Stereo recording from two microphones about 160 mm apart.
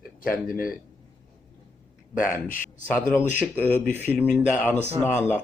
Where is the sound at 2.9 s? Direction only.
10° left (ahead or behind).